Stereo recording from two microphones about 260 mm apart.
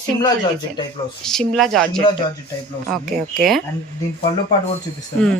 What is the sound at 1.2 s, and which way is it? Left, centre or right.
Speech, centre.